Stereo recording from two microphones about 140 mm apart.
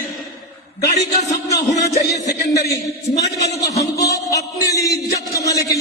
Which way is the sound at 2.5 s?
25° left (ahead or behind).